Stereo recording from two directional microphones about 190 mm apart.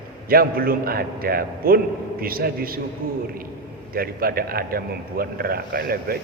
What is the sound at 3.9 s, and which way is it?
A man's voice, 50° right (ahead or behind).